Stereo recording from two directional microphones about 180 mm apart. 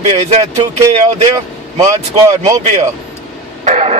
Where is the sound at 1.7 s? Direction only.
20° right (ahead or behind).